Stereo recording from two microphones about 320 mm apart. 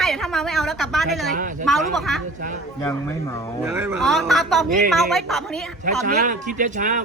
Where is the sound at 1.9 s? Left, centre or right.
Centre.